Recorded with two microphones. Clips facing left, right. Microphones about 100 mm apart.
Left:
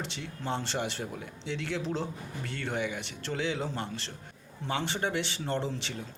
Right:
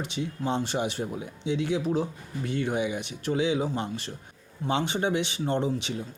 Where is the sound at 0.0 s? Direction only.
15° right (ahead or behind).